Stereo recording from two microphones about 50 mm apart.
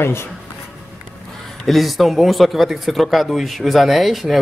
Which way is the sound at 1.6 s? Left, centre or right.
Centre.